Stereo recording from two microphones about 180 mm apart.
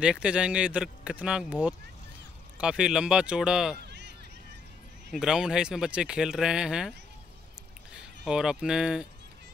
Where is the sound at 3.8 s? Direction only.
70° right (ahead or behind).